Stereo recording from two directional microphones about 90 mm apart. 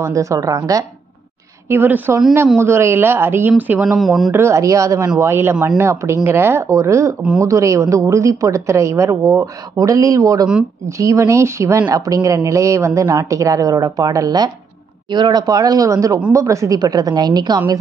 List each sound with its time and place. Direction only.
0.0 s a woman's voice: 35° right (ahead or behind)
1.7 s speech: 25° right (ahead or behind)
3.8 s speech: 5° right (ahead or behind)
4.3 s a woman's voice: 30° right (ahead or behind); by 17.6 s 50° right (ahead or behind)